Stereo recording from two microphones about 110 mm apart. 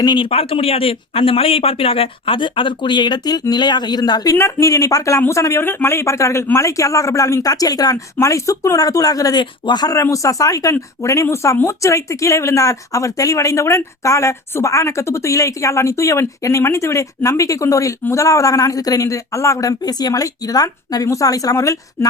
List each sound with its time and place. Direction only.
0.0 s speech: 40° left (ahead or behind)
0.3 s speech: 60° left (ahead or behind); by 4.4 s 35° left (ahead or behind)
4.4 s speech: 25° left (ahead or behind)